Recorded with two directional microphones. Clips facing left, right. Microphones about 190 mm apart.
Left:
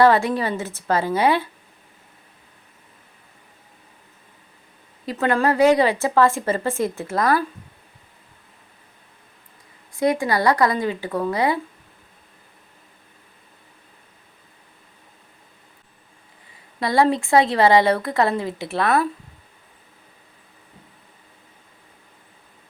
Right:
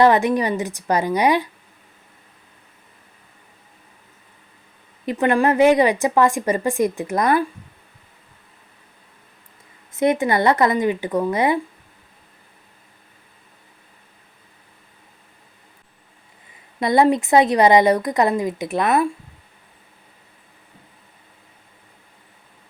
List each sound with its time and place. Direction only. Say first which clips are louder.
0.0 s a woman's voice: right 1 dB; 20° right (ahead or behind)
5.0 s a woman's voice: right 2 dB; 15° right (ahead or behind)
9.9 s speech: right 2 dB; 20° right (ahead or behind)
16.8 s speech: right 3 dB; 20° right (ahead or behind)